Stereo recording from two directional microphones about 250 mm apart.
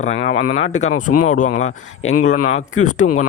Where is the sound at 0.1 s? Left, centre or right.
Left.